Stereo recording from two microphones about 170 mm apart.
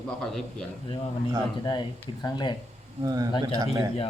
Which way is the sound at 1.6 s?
25° left (ahead or behind).